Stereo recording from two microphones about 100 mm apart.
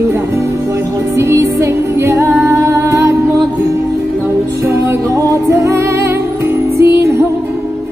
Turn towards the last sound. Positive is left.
turn(degrees=-30)  # may be behind; listen again after turning